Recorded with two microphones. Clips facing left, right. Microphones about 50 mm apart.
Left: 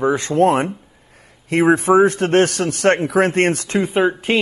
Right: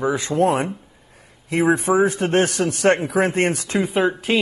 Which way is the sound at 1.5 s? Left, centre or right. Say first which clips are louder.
Left 3 dB; left.